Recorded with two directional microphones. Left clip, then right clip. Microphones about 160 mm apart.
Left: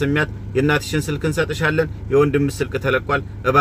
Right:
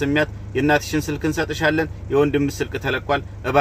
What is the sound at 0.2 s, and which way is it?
Speech, centre (ahead or behind).